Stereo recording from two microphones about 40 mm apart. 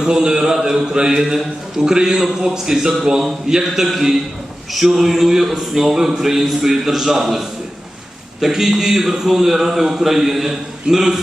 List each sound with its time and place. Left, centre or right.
0.0 s a man's voice: centre